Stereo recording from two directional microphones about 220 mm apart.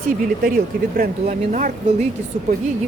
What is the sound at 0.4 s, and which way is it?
Speech, 40° right (ahead or behind).